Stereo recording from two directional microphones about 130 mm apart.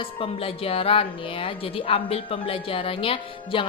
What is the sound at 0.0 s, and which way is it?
A woman's voice, 45° left (ahead or behind).